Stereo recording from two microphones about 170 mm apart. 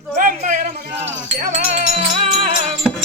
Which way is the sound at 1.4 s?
50° right (ahead or behind).